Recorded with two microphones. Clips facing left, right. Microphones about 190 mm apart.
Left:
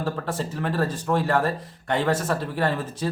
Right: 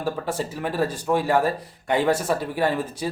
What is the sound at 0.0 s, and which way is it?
Speech, 10° right (ahead or behind).